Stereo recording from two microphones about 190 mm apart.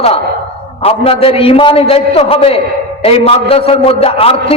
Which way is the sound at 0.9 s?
30° left (ahead or behind).